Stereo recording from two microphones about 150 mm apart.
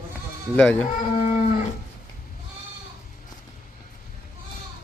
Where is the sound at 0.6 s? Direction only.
10° left (ahead or behind).